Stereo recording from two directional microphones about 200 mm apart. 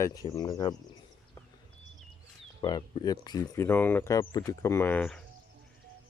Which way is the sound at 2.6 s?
20° left (ahead or behind).